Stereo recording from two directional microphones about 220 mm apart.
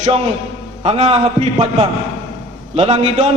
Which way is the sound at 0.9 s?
30° right (ahead or behind).